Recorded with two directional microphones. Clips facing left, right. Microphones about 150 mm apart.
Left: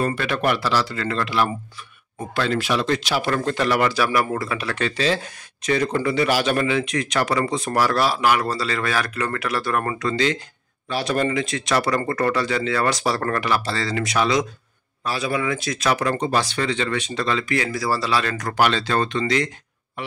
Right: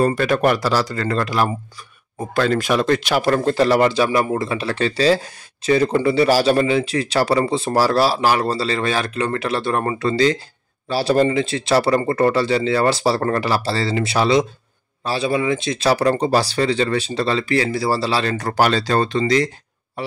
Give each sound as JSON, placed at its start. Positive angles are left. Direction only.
{"t": 0.0, "sound": "speech", "side_deg": -40}
{"t": 3.3, "sound": "speech", "side_deg": -35}